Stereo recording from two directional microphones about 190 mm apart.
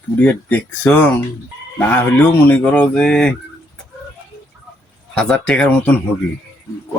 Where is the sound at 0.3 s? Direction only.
5° left (ahead or behind).